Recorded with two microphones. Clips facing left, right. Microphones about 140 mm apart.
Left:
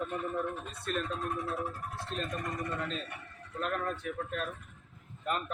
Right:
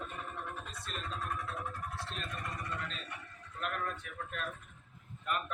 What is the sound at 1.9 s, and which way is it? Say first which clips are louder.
A man's voice: left 5 dB; 45° left (ahead or behind).